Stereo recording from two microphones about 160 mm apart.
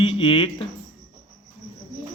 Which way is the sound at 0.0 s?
35° left (ahead or behind).